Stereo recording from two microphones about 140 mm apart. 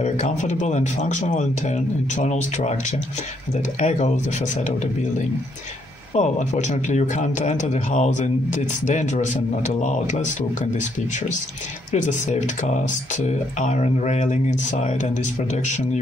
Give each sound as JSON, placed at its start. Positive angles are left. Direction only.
{"t": 0.0, "sound": "speech", "side_deg": 55}
{"t": 6.1, "sound": "speech", "side_deg": 60}